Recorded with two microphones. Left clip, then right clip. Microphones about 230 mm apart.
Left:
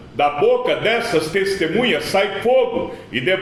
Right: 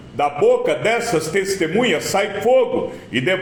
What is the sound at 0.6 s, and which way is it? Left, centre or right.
A man's voice, right.